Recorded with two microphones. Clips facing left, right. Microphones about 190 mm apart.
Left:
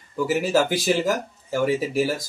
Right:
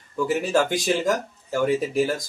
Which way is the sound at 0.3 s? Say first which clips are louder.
Left 1 dB; 5° left (ahead or behind).